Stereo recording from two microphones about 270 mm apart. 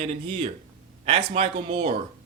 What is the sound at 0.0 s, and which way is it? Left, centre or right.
Speech, right.